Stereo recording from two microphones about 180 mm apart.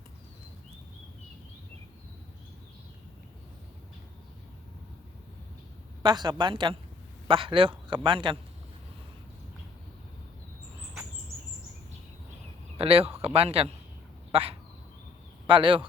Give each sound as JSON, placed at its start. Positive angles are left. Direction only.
{"t": 6.0, "sound": "a man's voice", "side_deg": -25}
{"t": 12.7, "sound": "a man's voice", "side_deg": -30}